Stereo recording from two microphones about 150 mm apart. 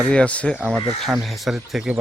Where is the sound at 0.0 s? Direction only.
5° left (ahead or behind).